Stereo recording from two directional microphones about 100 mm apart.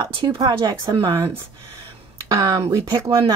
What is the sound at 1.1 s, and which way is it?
Speech, 25° right (ahead or behind).